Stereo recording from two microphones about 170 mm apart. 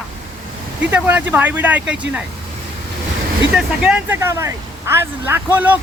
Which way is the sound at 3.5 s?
5° right (ahead or behind).